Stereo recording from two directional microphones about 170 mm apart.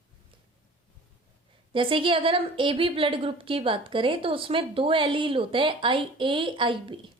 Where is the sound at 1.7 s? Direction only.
30° right (ahead or behind).